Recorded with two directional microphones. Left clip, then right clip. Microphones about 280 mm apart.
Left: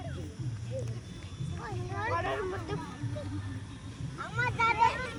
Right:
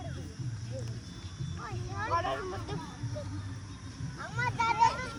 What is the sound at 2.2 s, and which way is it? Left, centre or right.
Cat, right.